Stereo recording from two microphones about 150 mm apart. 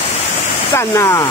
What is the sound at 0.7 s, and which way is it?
Speech, 20° left (ahead or behind).